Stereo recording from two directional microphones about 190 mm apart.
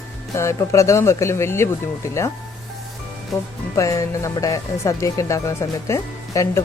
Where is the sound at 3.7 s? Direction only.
15° left (ahead or behind).